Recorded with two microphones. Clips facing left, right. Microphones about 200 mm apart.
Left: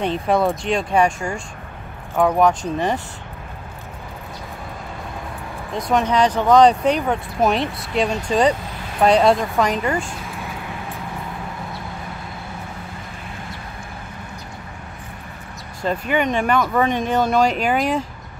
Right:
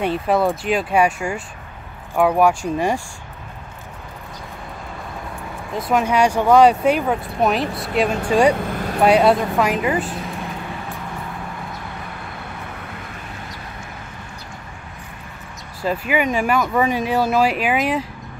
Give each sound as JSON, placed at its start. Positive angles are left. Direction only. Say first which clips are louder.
{"t": 0.0, "sound": "speech", "louder": "even", "side_deg": -5}
{"t": 5.8, "sound": "speech", "louder": "even", "side_deg": -5}
{"t": 8.5, "sound": "speech", "louder": "right 8 dB", "side_deg": -55}
{"t": 9.0, "sound": "speech", "louder": "even", "side_deg": -5}
{"t": 15.8, "sound": "speech", "louder": "even", "side_deg": -5}